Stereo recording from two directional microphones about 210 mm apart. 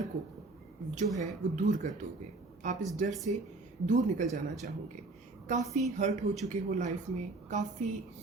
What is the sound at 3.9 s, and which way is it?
Speech, 35° right (ahead or behind).